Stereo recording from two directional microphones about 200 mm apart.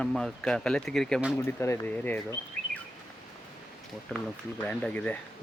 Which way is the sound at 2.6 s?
40° right (ahead or behind).